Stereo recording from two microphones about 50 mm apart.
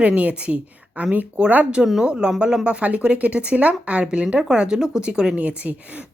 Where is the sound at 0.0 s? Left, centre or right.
Right.